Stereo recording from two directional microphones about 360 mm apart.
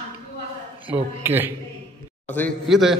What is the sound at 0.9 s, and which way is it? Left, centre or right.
A man's voice, centre.